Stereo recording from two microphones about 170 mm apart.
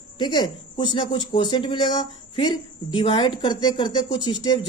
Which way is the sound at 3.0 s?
25° left (ahead or behind).